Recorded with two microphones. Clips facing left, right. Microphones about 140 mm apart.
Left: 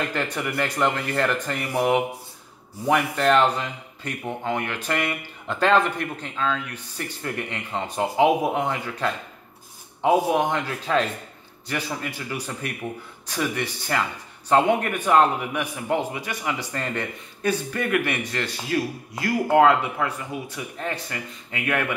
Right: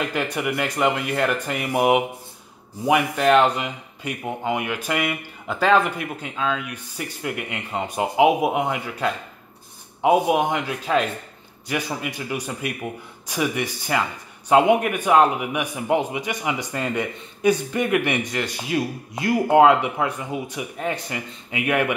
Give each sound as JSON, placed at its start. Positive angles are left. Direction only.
{"t": 0.0, "sound": "a man's voice", "side_deg": -10}